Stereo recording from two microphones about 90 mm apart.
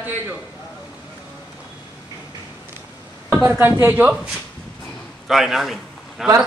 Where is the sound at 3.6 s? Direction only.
20° right (ahead or behind).